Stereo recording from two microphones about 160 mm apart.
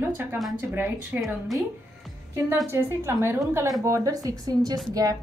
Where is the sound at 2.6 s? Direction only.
15° right (ahead or behind).